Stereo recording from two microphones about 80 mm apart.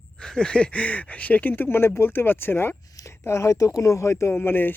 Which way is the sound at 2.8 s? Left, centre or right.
Left.